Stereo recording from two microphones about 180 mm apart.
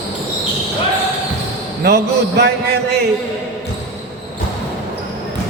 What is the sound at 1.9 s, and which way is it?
A man's voice, 65° right (ahead or behind).